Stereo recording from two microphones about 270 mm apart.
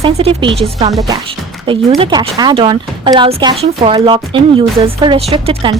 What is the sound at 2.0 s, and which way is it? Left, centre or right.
Speech, centre.